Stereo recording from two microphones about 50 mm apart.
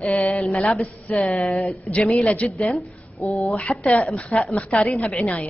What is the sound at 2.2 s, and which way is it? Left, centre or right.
Speech, left.